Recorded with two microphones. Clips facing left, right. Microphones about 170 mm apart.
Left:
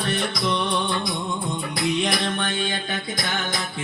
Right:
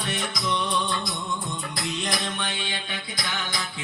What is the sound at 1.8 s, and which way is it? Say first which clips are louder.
Music: left 7 dB; 60° left (ahead or behind).